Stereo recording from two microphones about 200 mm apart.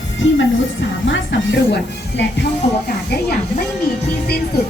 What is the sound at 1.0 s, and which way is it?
A woman's voice, 65° left (ahead or behind).